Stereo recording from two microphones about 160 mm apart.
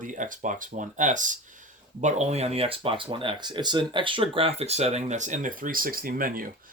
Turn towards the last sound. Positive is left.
turn(degrees=-60)  # may be behind; listen again after turning